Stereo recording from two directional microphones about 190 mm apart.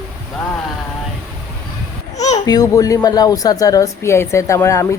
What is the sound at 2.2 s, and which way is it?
Babbling, 35° left (ahead or behind).